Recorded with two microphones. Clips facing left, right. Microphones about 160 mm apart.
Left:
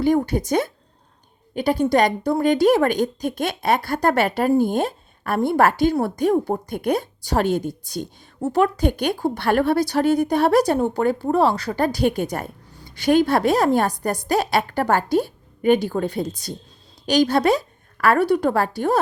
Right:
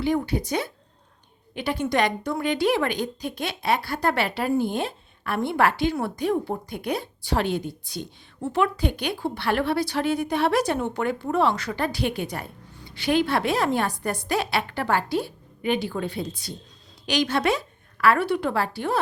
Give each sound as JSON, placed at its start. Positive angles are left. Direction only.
{"t": 0.0, "sound": "a woman's voice", "side_deg": 45}